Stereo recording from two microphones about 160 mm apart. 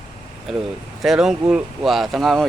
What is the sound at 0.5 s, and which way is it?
A man's voice, centre (ahead or behind).